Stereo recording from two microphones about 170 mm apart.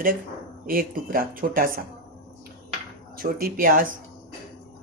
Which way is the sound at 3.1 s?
60° right (ahead or behind).